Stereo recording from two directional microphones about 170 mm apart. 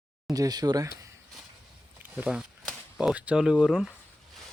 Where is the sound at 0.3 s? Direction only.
20° right (ahead or behind).